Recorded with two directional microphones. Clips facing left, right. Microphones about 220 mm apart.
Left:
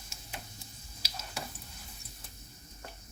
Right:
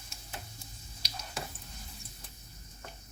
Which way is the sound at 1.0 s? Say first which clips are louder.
Even; 5° left (ahead or behind).